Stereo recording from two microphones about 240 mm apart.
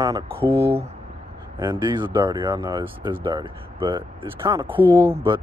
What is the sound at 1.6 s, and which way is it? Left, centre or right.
Speech, centre.